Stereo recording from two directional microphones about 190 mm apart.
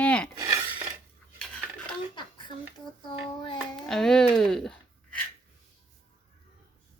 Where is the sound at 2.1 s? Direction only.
25° left (ahead or behind).